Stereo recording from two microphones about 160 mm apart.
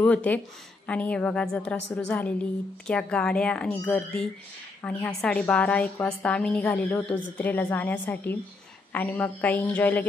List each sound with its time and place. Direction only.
0.0 s a woman's voice: 10° left (ahead or behind)